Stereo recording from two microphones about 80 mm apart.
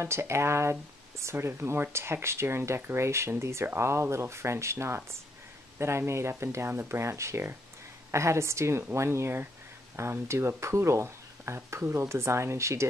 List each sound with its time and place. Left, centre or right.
0.0 s speech: right